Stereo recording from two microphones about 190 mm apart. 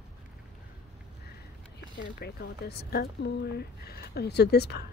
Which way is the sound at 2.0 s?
55° left (ahead or behind).